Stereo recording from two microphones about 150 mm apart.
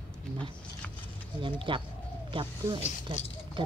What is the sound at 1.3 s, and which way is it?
Speech, 35° right (ahead or behind).